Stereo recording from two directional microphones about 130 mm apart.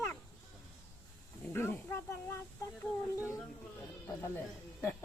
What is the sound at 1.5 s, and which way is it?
Speech, 20° left (ahead or behind).